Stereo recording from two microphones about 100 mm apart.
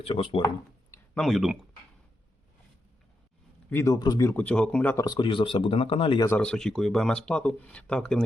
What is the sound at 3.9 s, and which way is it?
Speech, 45° left (ahead or behind).